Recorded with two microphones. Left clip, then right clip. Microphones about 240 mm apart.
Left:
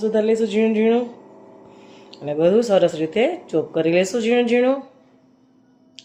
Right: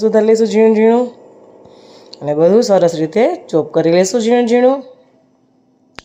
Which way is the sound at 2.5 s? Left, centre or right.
Right.